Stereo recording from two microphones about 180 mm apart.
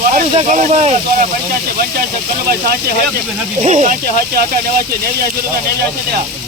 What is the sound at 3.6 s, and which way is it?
Speech, 40° right (ahead or behind).